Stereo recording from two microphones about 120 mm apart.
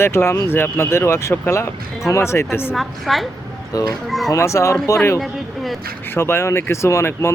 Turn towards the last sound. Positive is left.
turn(degrees=20)  # may be behind; listen again after turning